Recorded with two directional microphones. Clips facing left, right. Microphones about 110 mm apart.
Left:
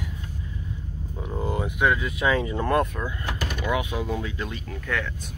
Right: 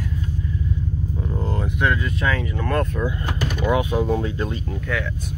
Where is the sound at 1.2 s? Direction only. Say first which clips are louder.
Left 1 dB; 10° left (ahead or behind).